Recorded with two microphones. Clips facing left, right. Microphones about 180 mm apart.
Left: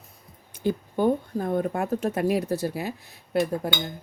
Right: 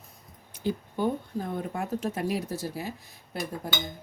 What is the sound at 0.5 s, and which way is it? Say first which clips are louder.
Speech: left 4 dB; 50° left (ahead or behind).